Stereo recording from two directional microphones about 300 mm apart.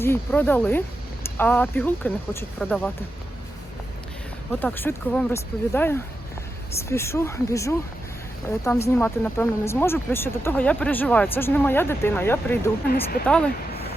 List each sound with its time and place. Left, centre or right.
0.0 s speech: centre
4.6 s speech: centre
12.9 s speech: left
13.2 s speech: centre